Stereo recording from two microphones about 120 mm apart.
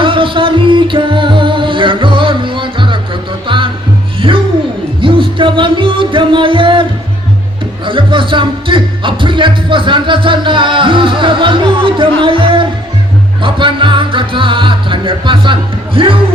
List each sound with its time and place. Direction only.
0.0 s music: 45° right (ahead or behind)
7.9 s music: 45° right (ahead or behind)
16.0 s speech: 45° right (ahead or behind)